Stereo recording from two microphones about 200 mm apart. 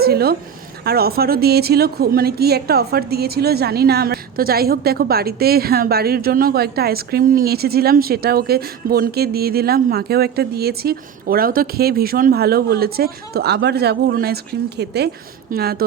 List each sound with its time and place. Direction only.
0.0 s a woman's voice: 50° right (ahead or behind)